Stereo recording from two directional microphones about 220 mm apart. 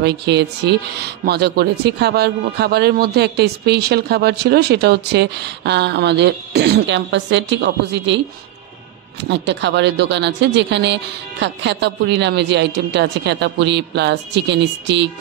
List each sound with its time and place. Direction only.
0.0 s a man's voice: 50° right (ahead or behind)
9.3 s a man's voice: 55° right (ahead or behind)